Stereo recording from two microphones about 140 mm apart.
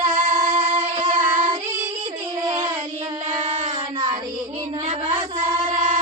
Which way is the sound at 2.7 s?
30° right (ahead or behind).